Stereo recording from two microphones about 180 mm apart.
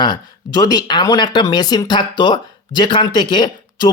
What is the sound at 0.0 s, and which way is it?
Speech, 25° left (ahead or behind).